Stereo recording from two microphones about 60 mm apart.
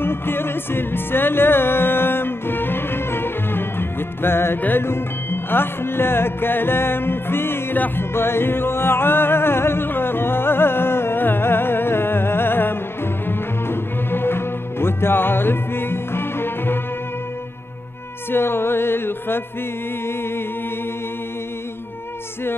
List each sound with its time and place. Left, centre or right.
0.0 s music: left
18.3 s music: left